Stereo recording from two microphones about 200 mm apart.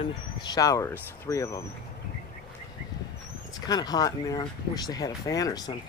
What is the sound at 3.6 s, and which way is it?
Speech, 20° left (ahead or behind).